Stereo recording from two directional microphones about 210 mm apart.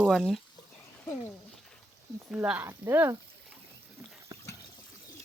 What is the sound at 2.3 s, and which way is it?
Speech, 5° right (ahead or behind).